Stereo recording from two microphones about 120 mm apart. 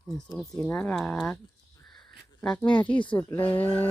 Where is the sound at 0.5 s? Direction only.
20° left (ahead or behind).